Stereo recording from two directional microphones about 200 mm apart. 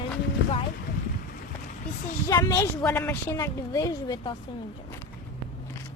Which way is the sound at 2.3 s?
15° left (ahead or behind).